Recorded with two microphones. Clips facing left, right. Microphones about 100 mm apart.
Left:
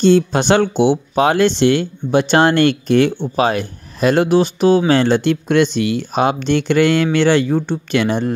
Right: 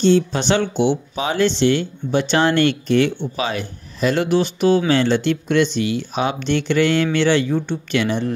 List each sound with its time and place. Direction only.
0.0 s speech: 50° left (ahead or behind)